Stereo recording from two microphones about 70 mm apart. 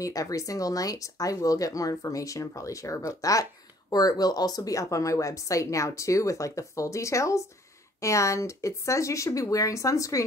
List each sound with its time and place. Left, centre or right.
0.0 s speech: left
3.9 s speech: left